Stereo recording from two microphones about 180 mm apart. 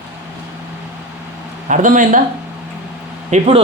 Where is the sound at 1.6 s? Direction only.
45° right (ahead or behind).